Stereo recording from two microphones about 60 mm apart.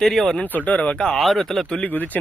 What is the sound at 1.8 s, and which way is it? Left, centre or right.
Speech, left.